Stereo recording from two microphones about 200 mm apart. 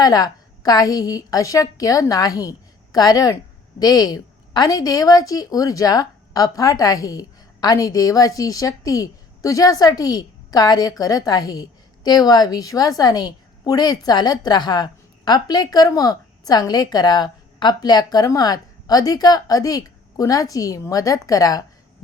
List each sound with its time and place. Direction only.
0.0 s a woman's voice: 20° left (ahead or behind)